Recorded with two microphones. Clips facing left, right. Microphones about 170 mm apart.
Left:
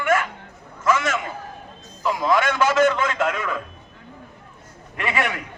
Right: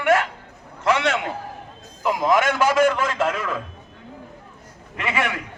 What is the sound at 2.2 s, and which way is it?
A man's voice, 15° right (ahead or behind).